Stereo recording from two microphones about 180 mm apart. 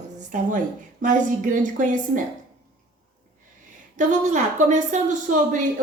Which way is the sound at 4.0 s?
45° right (ahead or behind).